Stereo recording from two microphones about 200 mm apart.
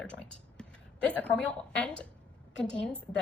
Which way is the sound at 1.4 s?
5° left (ahead or behind).